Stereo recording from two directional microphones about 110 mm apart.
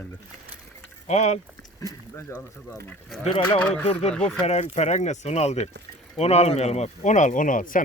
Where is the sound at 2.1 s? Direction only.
20° left (ahead or behind).